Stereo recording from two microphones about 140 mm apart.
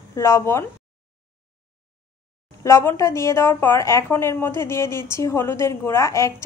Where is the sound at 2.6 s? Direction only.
20° left (ahead or behind).